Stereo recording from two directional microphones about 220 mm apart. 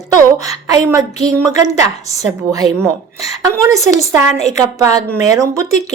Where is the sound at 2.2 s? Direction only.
15° right (ahead or behind).